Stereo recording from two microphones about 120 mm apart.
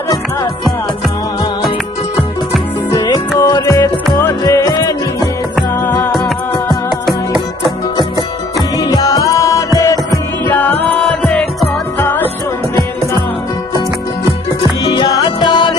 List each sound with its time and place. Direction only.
2.9 s music: 30° left (ahead or behind)
5.8 s music: 20° left (ahead or behind)
7.0 s music: centre (ahead or behind)
8.8 s music: 30° left (ahead or behind)
10.5 s music: 15° left (ahead or behind)
11.9 s music: 15° left (ahead or behind)
14.8 s music: 35° left (ahead or behind)